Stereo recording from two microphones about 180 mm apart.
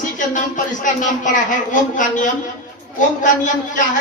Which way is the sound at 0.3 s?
45° left (ahead or behind).